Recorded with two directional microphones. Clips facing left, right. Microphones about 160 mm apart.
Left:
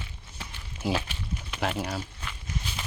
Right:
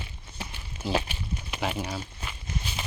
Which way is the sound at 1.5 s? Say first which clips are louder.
Left 1 dB; centre (ahead or behind).